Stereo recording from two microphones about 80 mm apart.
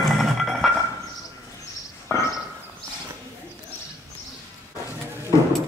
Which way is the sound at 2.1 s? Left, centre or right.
Left.